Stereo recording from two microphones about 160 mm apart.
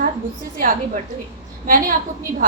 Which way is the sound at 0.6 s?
60° right (ahead or behind).